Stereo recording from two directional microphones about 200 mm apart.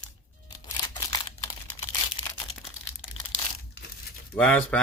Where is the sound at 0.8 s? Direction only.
20° left (ahead or behind).